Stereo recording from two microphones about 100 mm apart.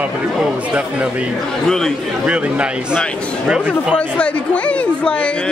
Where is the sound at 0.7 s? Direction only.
10° right (ahead or behind).